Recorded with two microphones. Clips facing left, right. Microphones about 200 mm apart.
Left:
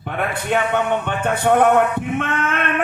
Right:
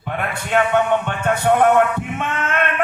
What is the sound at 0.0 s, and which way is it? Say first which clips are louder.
A man's voice: left 2 dB; 55° left (ahead or behind).